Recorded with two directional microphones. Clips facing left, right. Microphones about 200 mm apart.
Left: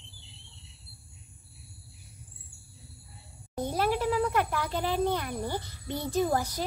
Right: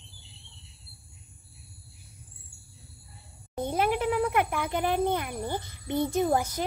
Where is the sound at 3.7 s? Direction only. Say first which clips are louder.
Right 1 dB; 20° right (ahead or behind).